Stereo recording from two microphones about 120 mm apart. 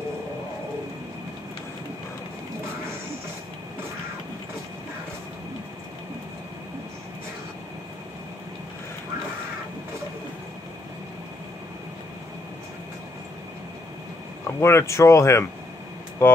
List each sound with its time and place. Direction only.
14.6 s speech: 20° left (ahead or behind)